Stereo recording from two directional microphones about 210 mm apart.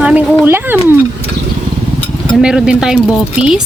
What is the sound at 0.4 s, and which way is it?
Speech, 10° right (ahead or behind).